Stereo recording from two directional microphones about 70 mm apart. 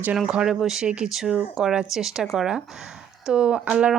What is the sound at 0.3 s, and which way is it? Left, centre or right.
Speech, centre.